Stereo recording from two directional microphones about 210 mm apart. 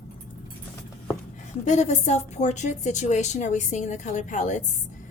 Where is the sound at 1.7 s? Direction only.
35° left (ahead or behind).